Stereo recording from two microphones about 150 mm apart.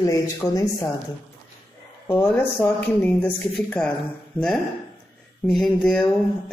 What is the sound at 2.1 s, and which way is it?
Speech, 15° left (ahead or behind).